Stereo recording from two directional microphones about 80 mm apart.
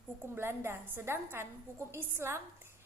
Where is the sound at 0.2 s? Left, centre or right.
Right.